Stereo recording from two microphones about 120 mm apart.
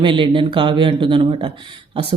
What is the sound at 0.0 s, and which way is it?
Speech, 45° right (ahead or behind).